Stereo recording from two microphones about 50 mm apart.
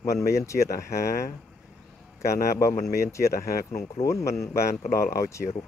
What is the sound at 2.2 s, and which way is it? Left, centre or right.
Speech, left.